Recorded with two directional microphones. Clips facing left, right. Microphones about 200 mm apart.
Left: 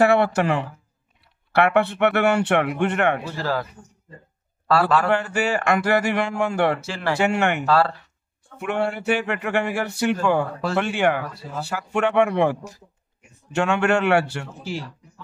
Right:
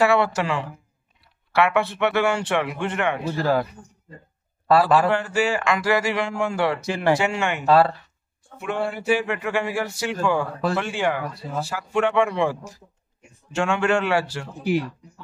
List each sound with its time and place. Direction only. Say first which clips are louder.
0.0 s speech: left 2 dB; 55° left (ahead or behind)
3.3 s speech: right 4 dB; 15° right (ahead or behind)
4.6 s a man's voice: right 2 dB; 20° right (ahead or behind)
5.3 s speech: left 1 dB; 60° left (ahead or behind)
6.8 s speech: right 5 dB; 15° right (ahead or behind)
7.2 s speech: left 3 dB; 60° left (ahead or behind)
7.6 s a man's voice: right 6 dB; 20° right (ahead or behind)
8.5 s speech: left 2 dB; 65° left (ahead or behind)